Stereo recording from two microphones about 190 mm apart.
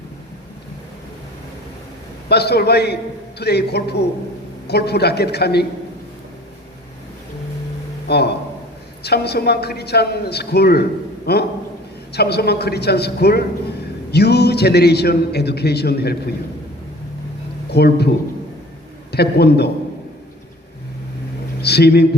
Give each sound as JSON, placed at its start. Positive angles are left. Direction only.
{"t": 2.3, "sound": "a man's voice", "side_deg": 60}
{"t": 8.0, "sound": "a man's voice", "side_deg": 60}
{"t": 17.7, "sound": "speech", "side_deg": 60}
{"t": 19.1, "sound": "a man's voice", "side_deg": 60}
{"t": 21.6, "sound": "speech", "side_deg": 60}